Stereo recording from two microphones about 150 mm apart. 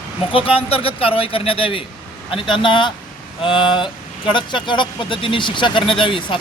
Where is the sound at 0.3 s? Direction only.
40° left (ahead or behind).